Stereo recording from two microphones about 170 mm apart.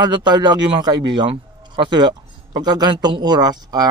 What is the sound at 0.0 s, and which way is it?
A man's voice, 25° right (ahead or behind).